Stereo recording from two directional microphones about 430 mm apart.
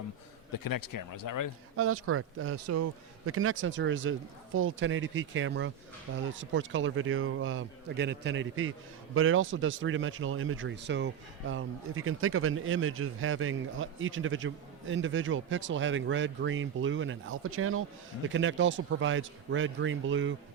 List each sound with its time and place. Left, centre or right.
0.5 s speech: left
1.7 s speech: right